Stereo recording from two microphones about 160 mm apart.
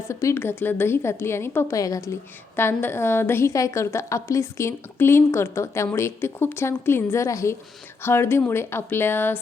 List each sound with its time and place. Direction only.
0.1 s a woman's voice: 20° left (ahead or behind)